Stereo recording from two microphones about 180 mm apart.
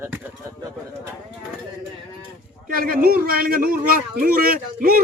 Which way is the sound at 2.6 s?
55° right (ahead or behind).